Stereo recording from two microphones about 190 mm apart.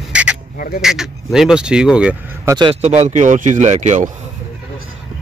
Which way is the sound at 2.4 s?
25° right (ahead or behind).